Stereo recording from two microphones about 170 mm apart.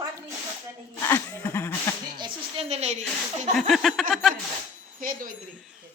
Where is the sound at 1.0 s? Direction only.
15° left (ahead or behind).